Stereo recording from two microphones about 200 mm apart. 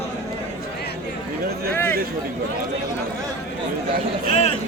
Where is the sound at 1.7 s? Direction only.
10° left (ahead or behind).